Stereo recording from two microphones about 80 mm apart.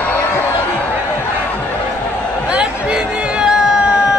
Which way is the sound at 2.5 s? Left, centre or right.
Centre.